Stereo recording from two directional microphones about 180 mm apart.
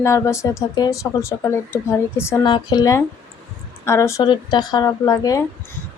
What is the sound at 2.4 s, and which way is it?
A woman's voice, 25° left (ahead or behind).